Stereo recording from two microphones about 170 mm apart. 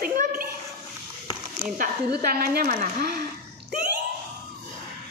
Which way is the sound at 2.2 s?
65° right (ahead or behind).